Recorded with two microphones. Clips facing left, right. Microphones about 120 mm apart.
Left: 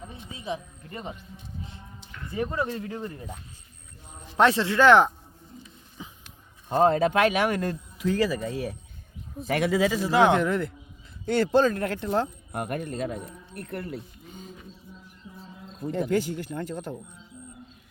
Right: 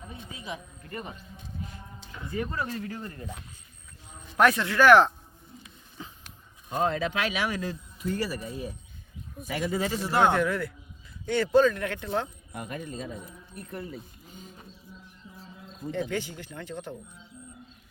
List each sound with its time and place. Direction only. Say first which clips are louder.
0.3 s speech: left 8 dB; 25° left (ahead or behind)
2.3 s speech: left 3 dB; 20° left (ahead or behind)
4.4 s speech: left 1 dB; 25° left (ahead or behind)
6.0 s a sound: even; 10° left (ahead or behind)
6.7 s speech: left 7 dB; 40° left (ahead or behind); by 8.7 s 90° left
9.5 s speech: left 6 dB; 75° left (ahead or behind)
11.5 s speech: right 3 dB; 35° left (ahead or behind)
12.5 s speech: left 6 dB; 60° left (ahead or behind)
15.9 s speech: left 5 dB; 45° left (ahead or behind)